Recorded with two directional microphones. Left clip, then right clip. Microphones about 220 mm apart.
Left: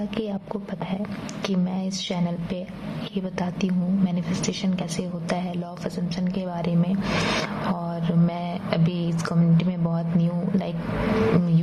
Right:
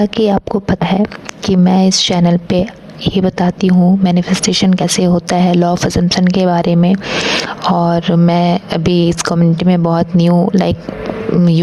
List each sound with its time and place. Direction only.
0.0 s a woman's voice: 45° right (ahead or behind)